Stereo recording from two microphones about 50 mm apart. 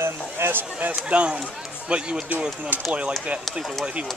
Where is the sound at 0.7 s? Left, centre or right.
Right.